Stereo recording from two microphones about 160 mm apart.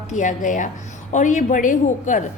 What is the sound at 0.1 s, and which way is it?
A woman's voice, 50° left (ahead or behind).